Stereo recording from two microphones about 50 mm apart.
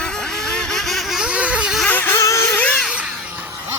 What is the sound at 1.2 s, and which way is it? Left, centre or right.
Vehicle, right.